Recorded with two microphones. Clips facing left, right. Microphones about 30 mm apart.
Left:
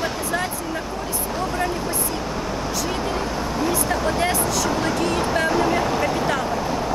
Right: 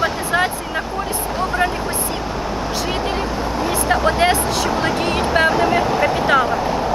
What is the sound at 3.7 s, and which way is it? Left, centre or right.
Speech, right.